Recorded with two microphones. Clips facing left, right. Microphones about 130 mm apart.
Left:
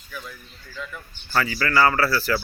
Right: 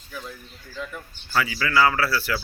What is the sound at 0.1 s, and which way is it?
Speech, 30° right (ahead or behind).